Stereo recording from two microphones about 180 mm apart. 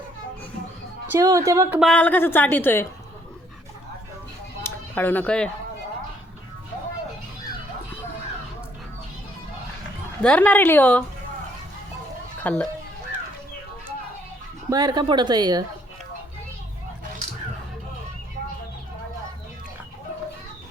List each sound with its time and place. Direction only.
1.2 s speech: 20° right (ahead or behind)
1.8 s a woman's voice: 5° left (ahead or behind)
4.6 s a sound: 10° left (ahead or behind)
10.2 s a woman's voice: 5° left (ahead or behind)
12.4 s speech: 10° left (ahead or behind)
14.7 s speech: 20° right (ahead or behind)